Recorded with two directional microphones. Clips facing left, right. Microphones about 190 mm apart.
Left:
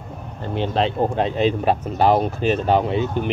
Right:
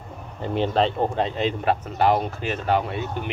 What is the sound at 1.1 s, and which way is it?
Speech, 15° left (ahead or behind).